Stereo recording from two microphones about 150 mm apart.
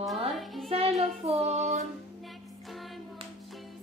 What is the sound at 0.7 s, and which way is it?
Music, 40° right (ahead or behind).